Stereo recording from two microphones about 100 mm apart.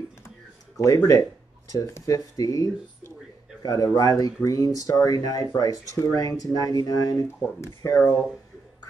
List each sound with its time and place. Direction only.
0.7 s speech: 35° left (ahead or behind)